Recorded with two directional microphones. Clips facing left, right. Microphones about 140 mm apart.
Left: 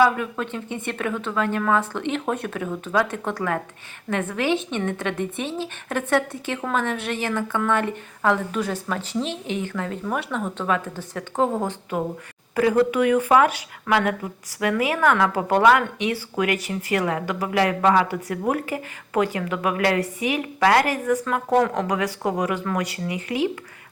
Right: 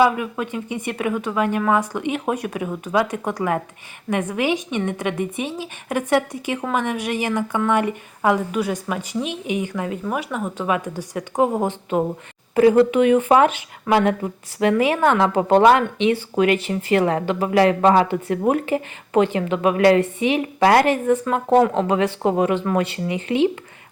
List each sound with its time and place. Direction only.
0.0 s a woman's voice: 10° right (ahead or behind); by 23.5 s 25° right (ahead or behind)